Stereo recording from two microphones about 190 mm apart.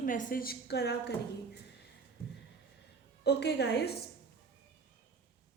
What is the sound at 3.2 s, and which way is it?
Speech, 60° left (ahead or behind).